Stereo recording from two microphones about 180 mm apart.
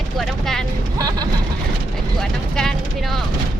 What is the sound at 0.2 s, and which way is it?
Vehicle, centre (ahead or behind).